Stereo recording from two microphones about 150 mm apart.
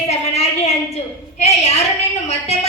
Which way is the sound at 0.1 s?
45° left (ahead or behind).